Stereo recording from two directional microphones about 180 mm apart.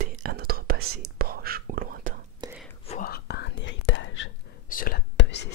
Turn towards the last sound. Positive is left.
turn(degrees=75)  # may be behind; listen again after turning